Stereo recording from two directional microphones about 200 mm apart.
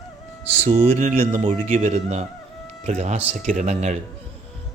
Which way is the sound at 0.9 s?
35° right (ahead or behind).